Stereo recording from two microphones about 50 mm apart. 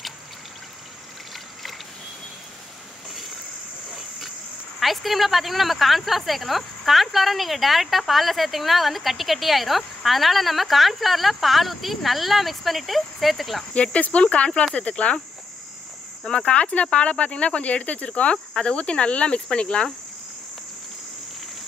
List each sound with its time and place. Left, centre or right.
1.3 s trickle: centre
4.7 s speech: centre
13.7 s speech: left
16.3 s speech: left